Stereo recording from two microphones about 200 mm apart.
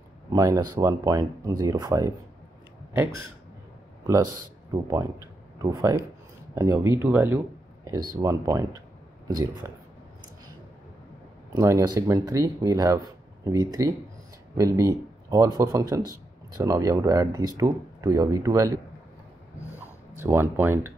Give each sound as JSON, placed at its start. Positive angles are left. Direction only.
{"t": 0.3, "sound": "speech", "side_deg": -15}
{"t": 5.6, "sound": "speech", "side_deg": -15}
{"t": 11.5, "sound": "speech", "side_deg": -15}
{"t": 20.2, "sound": "speech", "side_deg": -10}